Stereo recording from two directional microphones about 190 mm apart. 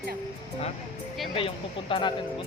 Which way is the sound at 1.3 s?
30° left (ahead or behind).